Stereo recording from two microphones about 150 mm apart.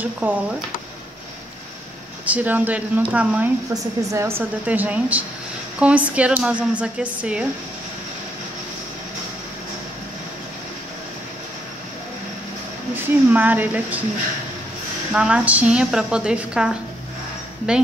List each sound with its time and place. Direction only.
0.0 s a woman's voice: 10° right (ahead or behind)
2.2 s a woman's voice: 10° right (ahead or behind)
3.7 s a woman's voice: 20° right (ahead or behind)
4.4 s a woman's voice: 10° right (ahead or behind)
12.9 s a woman's voice: 10° right (ahead or behind)
15.1 s a woman's voice: 5° right (ahead or behind)